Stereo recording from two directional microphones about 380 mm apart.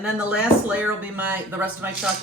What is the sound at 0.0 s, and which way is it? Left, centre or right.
Speech, centre.